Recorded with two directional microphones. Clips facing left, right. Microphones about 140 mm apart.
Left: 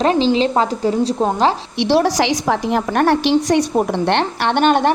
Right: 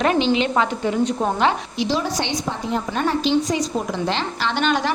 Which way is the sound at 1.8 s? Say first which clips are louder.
Left 8 dB; 70° left (ahead or behind).